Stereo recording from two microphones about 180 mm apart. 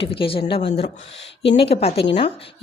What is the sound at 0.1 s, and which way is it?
A woman's voice, 30° left (ahead or behind).